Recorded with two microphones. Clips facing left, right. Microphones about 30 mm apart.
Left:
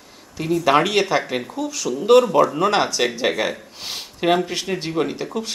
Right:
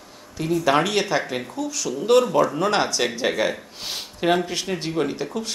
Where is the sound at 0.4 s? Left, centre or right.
Centre.